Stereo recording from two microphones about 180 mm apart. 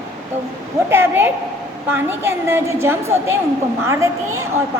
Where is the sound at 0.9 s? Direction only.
10° right (ahead or behind).